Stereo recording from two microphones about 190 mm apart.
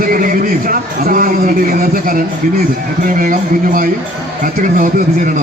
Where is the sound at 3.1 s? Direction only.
45° right (ahead or behind).